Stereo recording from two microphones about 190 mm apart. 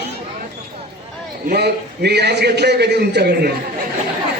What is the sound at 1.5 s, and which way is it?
Speech, 60° right (ahead or behind).